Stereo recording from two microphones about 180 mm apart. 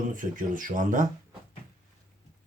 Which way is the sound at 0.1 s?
45° right (ahead or behind).